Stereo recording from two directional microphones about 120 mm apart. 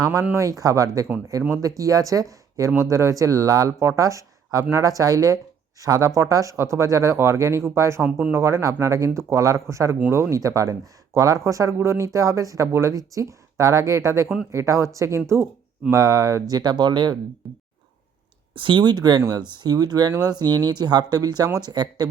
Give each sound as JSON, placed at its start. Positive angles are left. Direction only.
{"t": 0.6, "sound": "speech", "side_deg": -30}
{"t": 17.4, "sound": "speech", "side_deg": -15}
{"t": 18.5, "sound": "speech", "side_deg": -45}